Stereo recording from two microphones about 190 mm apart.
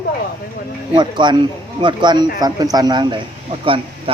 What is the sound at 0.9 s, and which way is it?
Speech, 25° right (ahead or behind).